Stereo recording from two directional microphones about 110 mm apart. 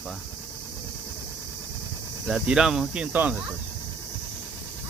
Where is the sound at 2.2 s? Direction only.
5° right (ahead or behind).